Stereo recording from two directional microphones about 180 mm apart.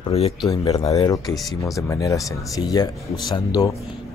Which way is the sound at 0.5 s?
20° left (ahead or behind).